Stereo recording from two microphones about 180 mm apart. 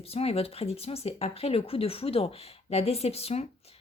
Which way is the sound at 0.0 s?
35° left (ahead or behind).